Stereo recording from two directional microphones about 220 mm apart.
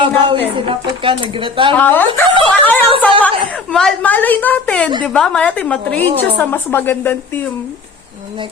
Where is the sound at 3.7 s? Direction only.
5° left (ahead or behind).